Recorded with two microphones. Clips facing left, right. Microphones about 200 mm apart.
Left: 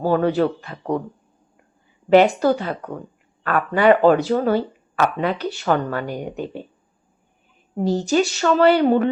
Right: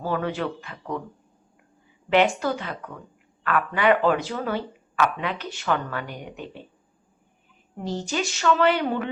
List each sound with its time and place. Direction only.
0.0 s speech: 35° left (ahead or behind)
2.0 s speech: 40° left (ahead or behind)
7.8 s speech: 40° left (ahead or behind)